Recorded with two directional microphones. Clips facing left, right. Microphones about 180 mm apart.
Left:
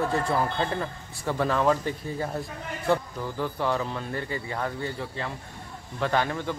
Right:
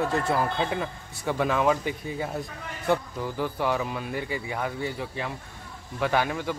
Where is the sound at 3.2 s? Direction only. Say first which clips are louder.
Right 1 dB; 10° right (ahead or behind).